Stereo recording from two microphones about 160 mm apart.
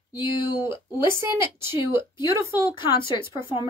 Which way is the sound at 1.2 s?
15° right (ahead or behind).